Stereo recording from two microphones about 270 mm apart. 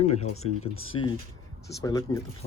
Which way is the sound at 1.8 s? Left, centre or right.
Centre.